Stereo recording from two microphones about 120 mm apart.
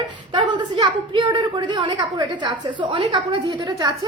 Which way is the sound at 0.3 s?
40° right (ahead or behind).